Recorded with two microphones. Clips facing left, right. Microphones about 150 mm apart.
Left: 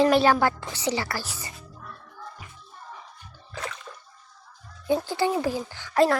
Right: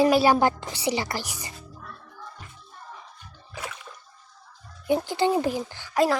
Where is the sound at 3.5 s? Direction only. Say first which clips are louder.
Left 2 dB; 10° right (ahead or behind).